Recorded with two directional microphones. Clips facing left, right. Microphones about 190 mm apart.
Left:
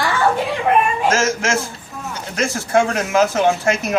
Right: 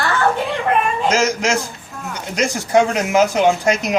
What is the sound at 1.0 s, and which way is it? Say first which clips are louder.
Speech: right 1 dB; 15° right (ahead or behind).